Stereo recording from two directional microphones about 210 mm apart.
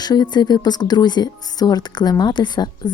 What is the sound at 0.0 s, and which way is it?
Speech, 20° left (ahead or behind).